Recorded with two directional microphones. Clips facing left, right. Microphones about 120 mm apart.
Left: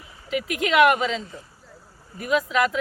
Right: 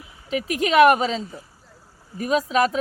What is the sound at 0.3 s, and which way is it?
Speech, 30° right (ahead or behind).